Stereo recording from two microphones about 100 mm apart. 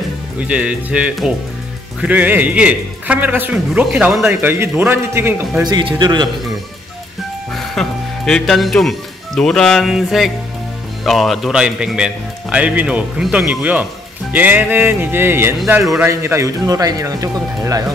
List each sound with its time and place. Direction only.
0.4 s a man's voice: 15° right (ahead or behind)
5.6 s speech: 45° right (ahead or behind)
7.5 s a man's voice: 5° left (ahead or behind); by 17.9 s 35° right (ahead or behind)